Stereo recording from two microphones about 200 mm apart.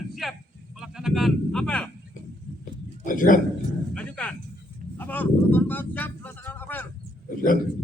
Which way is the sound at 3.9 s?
5° left (ahead or behind).